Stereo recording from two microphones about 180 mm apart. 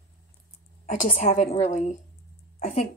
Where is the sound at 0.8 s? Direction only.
45° left (ahead or behind).